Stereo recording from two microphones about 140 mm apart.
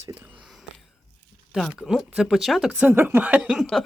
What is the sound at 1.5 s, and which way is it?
Speech, centre (ahead or behind).